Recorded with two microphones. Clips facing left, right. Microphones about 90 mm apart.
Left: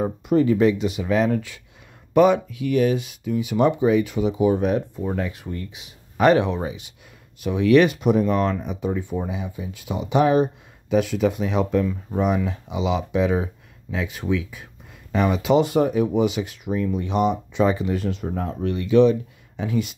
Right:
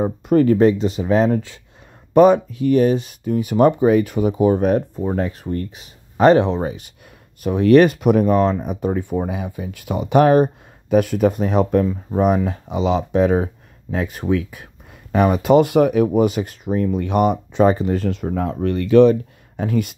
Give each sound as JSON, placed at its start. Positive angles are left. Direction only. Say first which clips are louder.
{"t": 0.3, "sound": "speech", "louder": "right 4 dB", "side_deg": -50}
{"t": 6.1, "sound": "speech", "louder": "right 4 dB", "side_deg": -35}
{"t": 6.6, "sound": "speech", "louder": "right 4 dB", "side_deg": -45}
{"t": 8.3, "sound": "speech", "louder": "right 5 dB", "side_deg": -35}
{"t": 8.6, "sound": "speech", "louder": "right 4 dB", "side_deg": -50}
{"t": 15.7, "sound": "speech", "louder": "right 5 dB", "side_deg": -70}
{"t": 16.1, "sound": "speech", "louder": "right 4 dB", "side_deg": -45}
{"t": 18.3, "sound": "speech", "louder": "right 5 dB", "side_deg": -90}
{"t": 18.7, "sound": "speech", "louder": "right 4 dB", "side_deg": -55}